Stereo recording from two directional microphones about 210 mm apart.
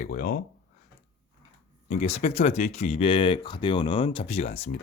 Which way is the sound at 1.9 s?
30° left (ahead or behind).